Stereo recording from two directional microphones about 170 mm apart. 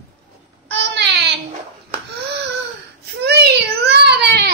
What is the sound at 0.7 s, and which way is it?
Baby cry, 80° right.